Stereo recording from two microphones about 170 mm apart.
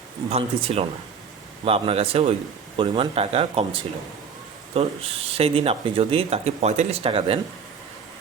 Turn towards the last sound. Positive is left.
turn(degrees=-35)  # may be behind; listen again after turning